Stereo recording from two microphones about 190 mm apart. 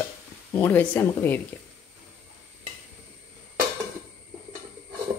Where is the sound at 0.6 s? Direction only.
10° left (ahead or behind).